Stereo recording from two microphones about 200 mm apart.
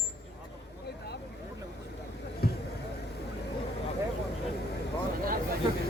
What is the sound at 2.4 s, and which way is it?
Basketball bounce, 50° left (ahead or behind).